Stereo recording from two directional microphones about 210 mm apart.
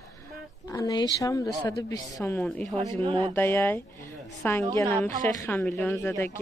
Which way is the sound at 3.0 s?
20° right (ahead or behind).